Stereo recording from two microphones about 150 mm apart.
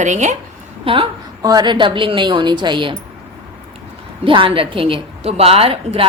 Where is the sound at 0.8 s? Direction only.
35° right (ahead or behind).